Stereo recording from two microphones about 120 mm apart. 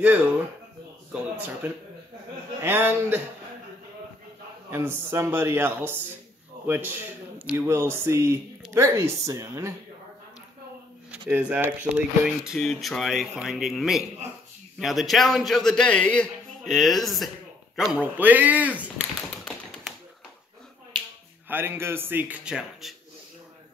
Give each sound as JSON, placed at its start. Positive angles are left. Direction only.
{"t": 0.0, "sound": "a man's voice", "side_deg": -10}
{"t": 2.6, "sound": "speech", "side_deg": -20}
{"t": 4.6, "sound": "a man's voice", "side_deg": -20}
{"t": 11.1, "sound": "a man's voice", "side_deg": -15}
{"t": 12.5, "sound": "a man's voice", "side_deg": 0}
{"t": 17.7, "sound": "a man's voice", "side_deg": -10}
{"t": 21.5, "sound": "a man's voice", "side_deg": -20}